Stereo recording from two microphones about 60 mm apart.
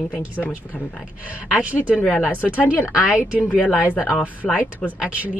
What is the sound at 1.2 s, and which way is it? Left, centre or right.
Speech, right.